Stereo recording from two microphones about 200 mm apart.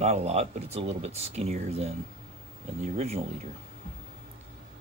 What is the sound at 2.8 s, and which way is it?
Speech, 30° right (ahead or behind).